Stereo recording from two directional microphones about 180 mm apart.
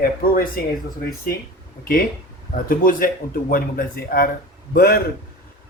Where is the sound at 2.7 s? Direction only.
50° left (ahead or behind).